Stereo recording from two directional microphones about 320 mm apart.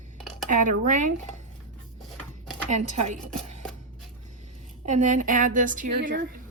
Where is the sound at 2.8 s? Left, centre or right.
Right.